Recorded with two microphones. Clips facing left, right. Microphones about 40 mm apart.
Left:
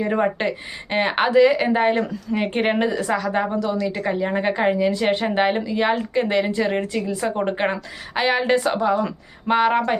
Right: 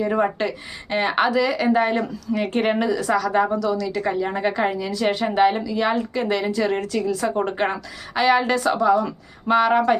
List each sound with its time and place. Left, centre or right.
0.0 s a woman's voice: left